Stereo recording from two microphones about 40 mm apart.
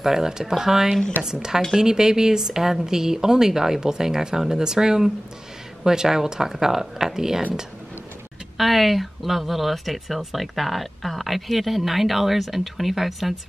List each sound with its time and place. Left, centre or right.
0.0 s speech: centre
8.5 s speech: centre